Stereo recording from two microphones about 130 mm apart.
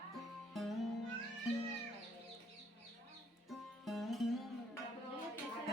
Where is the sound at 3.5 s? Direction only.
Centre (ahead or behind).